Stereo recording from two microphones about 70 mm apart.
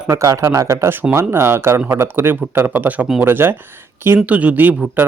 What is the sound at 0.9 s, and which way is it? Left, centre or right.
Speech, right.